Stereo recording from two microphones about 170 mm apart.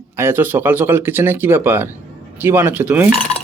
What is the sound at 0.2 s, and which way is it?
Speech, 15° right (ahead or behind).